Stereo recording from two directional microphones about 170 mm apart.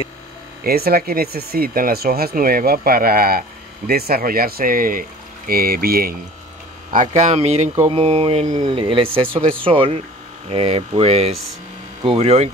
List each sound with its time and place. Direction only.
0.7 s speech: 65° right (ahead or behind)
6.9 s speech: 50° right (ahead or behind)